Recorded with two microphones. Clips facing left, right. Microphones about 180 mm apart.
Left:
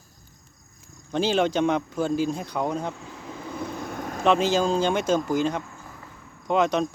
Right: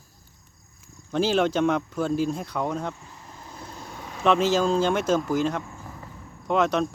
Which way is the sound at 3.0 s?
80° left.